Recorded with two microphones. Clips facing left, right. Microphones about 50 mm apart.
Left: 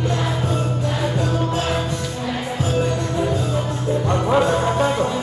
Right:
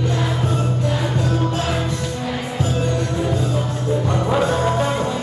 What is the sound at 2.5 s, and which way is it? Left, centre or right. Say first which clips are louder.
Music: left 1 dB; centre.